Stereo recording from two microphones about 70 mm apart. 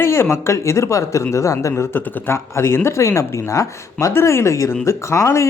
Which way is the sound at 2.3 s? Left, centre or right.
Left.